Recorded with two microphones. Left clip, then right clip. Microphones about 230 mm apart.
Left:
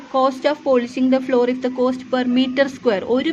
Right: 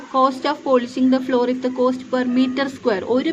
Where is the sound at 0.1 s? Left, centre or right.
Left.